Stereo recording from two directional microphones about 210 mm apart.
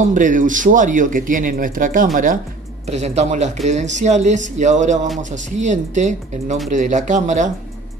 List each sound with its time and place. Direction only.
0.0 s speech: 40° right (ahead or behind)